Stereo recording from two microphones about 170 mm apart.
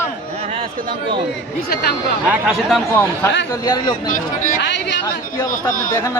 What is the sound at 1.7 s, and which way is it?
Speech, 70° left (ahead or behind).